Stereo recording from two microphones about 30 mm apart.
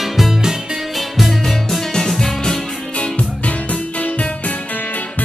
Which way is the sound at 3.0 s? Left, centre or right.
Left.